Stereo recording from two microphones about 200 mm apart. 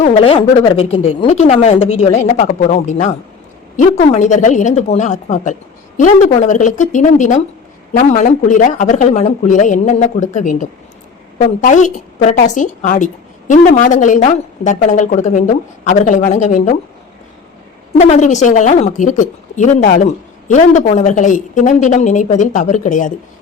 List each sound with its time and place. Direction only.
0.0 s a woman's voice: 30° left (ahead or behind)
18.0 s a woman's voice: 35° left (ahead or behind)